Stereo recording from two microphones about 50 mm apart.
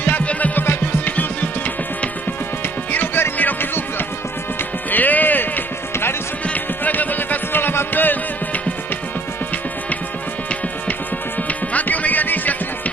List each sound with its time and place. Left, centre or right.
0.0 s music: left
0.6 s music: left
2.9 s music: left
4.9 s music: left
11.4 s music: left